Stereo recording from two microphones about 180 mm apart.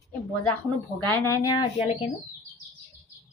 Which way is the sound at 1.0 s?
15° left (ahead or behind).